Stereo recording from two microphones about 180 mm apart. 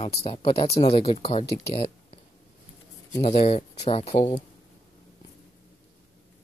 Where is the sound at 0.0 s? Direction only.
35° left (ahead or behind).